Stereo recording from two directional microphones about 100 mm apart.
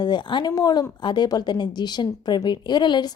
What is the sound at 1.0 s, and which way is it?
A woman's voice, 50° left (ahead or behind).